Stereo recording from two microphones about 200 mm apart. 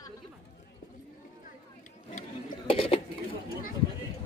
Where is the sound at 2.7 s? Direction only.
30° left (ahead or behind).